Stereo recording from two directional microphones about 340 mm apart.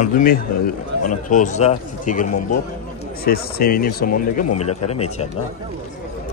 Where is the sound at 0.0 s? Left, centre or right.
Left.